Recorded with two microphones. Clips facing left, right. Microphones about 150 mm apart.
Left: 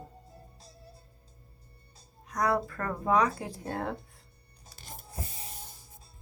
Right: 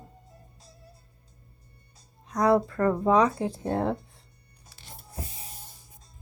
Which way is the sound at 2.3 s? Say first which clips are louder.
Right 6 dB; 25° right (ahead or behind).